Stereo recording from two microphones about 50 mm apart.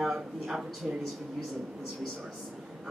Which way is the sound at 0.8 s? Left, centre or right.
Centre.